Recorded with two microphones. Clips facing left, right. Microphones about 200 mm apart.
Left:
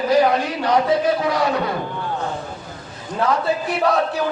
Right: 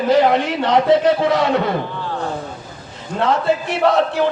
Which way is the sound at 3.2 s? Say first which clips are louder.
Right 3 dB; 25° right (ahead or behind).